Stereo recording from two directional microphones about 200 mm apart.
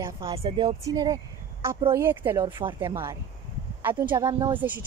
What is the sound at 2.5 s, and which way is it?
Speech, 25° right (ahead or behind).